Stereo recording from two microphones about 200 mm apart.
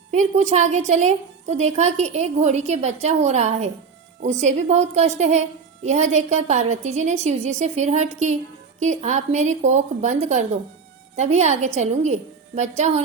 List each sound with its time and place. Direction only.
0.1 s a woman's voice: 35° right (ahead or behind)